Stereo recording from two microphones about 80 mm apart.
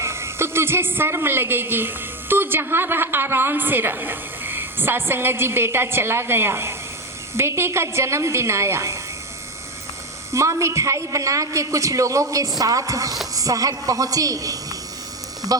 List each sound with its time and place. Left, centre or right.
0.0 s a woman's voice: right
10.3 s a woman's voice: right